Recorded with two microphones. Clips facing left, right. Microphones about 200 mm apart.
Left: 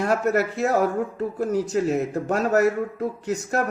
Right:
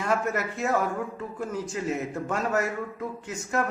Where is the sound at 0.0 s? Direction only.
40° left (ahead or behind).